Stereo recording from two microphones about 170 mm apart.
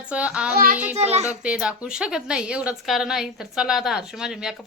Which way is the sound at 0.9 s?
40° right (ahead or behind).